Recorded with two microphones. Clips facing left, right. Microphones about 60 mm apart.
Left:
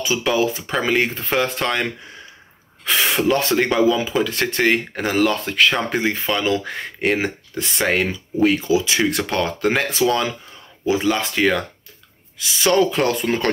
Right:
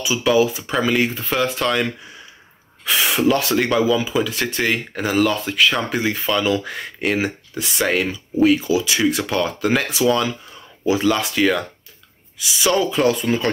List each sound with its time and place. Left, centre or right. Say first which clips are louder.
0.0 s speech: right 2 dB; left
2.8 s a sound: even; left
3.3 s speech: right 1 dB; left
5.9 s speech: even; left
9.1 s speech: even; left